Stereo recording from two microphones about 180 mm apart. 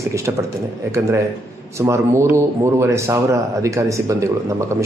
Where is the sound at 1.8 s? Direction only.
15° right (ahead or behind).